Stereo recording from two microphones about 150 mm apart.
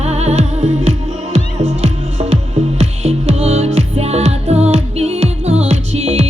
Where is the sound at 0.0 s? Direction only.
45° right (ahead or behind).